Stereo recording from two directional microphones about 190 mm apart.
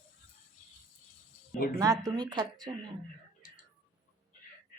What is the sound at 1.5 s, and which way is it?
Speech, 55° left (ahead or behind).